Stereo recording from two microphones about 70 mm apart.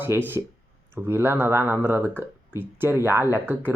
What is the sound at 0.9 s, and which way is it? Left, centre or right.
Speech, right.